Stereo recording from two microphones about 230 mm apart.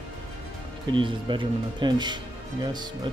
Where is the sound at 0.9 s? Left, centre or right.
Right.